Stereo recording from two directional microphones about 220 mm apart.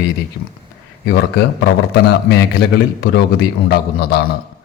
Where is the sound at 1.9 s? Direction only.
50° left (ahead or behind).